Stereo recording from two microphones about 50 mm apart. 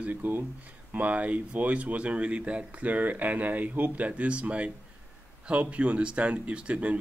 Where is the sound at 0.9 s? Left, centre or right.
Right.